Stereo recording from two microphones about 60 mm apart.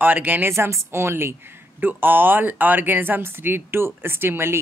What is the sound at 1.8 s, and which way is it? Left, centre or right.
Speech, right.